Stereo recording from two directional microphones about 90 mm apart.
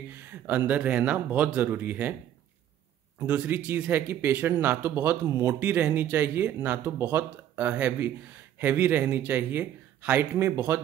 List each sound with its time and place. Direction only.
0.3 s speech: 20° right (ahead or behind)
3.3 s speech: 20° right (ahead or behind)